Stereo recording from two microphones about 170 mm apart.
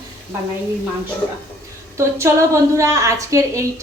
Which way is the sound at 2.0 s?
15° right (ahead or behind).